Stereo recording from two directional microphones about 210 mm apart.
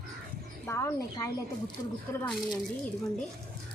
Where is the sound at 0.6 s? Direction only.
15° left (ahead or behind).